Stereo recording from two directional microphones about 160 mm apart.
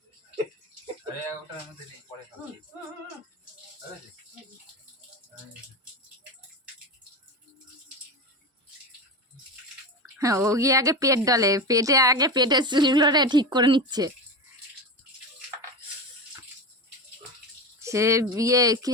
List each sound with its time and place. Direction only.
10.2 s a woman's voice: 20° right (ahead or behind)
17.8 s a woman's voice: 20° right (ahead or behind)